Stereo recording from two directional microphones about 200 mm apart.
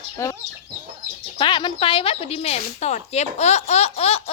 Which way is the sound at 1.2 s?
25° left (ahead or behind).